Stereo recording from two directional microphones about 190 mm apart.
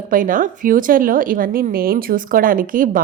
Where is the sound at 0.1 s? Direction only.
45° right (ahead or behind).